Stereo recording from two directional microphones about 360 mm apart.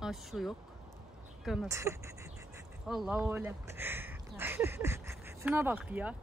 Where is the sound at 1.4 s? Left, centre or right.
Centre.